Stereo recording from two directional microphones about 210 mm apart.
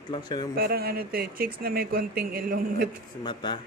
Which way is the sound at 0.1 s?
20° left (ahead or behind).